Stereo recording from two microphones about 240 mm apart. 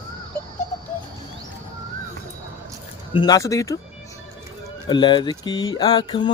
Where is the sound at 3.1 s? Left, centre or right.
Centre.